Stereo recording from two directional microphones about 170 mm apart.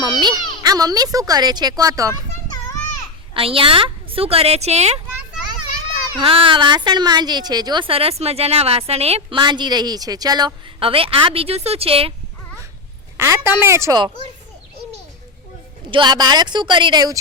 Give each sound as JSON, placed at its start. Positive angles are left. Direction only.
{"t": 0.0, "sound": "a woman's voice", "side_deg": -25}
{"t": 3.3, "sound": "a woman's voice", "side_deg": -35}
{"t": 6.1, "sound": "a woman's voice", "side_deg": -30}
{"t": 13.1, "sound": "speech", "side_deg": -15}
{"t": 15.9, "sound": "a woman's voice", "side_deg": -25}